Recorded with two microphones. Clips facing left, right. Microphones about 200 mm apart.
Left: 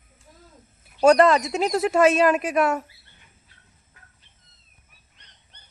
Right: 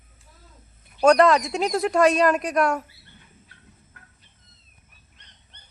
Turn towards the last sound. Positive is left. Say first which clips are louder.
# right 3 dB
turn(degrees=-55)  # may be behind; listen again after turning